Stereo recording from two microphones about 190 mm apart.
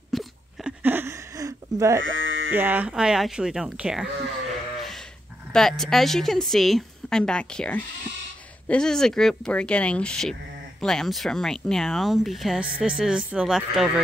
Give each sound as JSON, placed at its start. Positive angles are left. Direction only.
{"t": 0.1, "sound": "a sound", "side_deg": 0}
{"t": 2.0, "sound": "sheep", "side_deg": -90}
{"t": 2.5, "sound": "a woman's voice", "side_deg": -10}
{"t": 5.5, "sound": "a woman's voice", "side_deg": 0}